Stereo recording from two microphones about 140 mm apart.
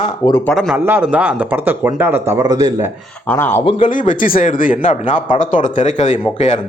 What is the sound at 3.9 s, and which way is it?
Speech, 70° left (ahead or behind).